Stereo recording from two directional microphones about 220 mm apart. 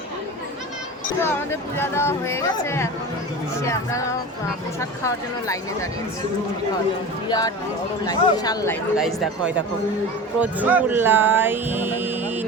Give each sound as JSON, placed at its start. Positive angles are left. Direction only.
{"t": 1.2, "sound": "speech", "side_deg": 10}
{"t": 7.3, "sound": "speech", "side_deg": 15}
{"t": 9.0, "sound": "speech", "side_deg": 0}